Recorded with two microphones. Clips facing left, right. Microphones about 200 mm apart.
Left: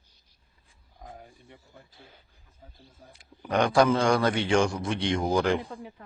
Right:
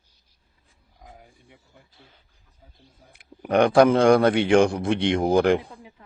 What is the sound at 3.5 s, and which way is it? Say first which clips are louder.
A man's voice: right 5 dB; 55° right (ahead or behind).